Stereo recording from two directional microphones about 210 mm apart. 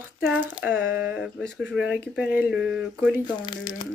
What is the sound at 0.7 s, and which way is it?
Speech, 10° right (ahead or behind).